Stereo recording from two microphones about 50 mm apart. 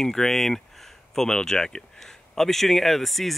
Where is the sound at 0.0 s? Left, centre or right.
Centre.